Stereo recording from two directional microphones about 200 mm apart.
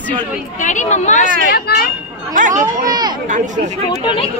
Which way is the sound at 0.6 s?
40° left (ahead or behind).